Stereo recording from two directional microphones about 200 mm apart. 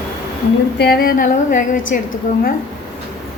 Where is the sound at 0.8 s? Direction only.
50° left (ahead or behind).